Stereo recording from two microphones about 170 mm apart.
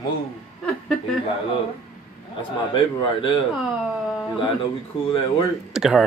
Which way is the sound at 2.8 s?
30° left (ahead or behind).